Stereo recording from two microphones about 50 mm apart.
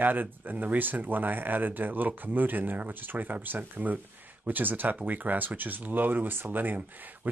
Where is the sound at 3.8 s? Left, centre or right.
Right.